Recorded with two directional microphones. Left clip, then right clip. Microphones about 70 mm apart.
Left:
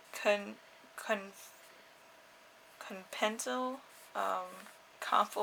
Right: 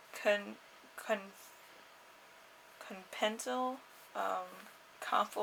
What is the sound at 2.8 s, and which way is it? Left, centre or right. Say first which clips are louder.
Speech: left 1 dB; left.